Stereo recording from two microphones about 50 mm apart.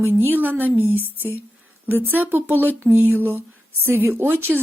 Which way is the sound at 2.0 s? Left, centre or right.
Right.